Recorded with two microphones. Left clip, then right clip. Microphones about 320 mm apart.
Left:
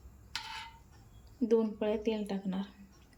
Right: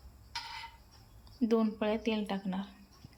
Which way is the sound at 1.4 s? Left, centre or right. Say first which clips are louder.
Left 1 dB; centre.